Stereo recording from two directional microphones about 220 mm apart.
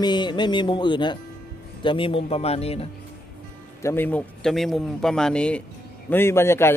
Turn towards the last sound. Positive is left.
turn(degrees=10)  # may be behind; listen again after turning